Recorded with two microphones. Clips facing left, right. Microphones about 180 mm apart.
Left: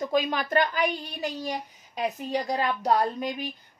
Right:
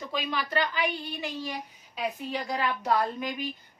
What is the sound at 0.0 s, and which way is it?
A woman's voice, 45° left (ahead or behind).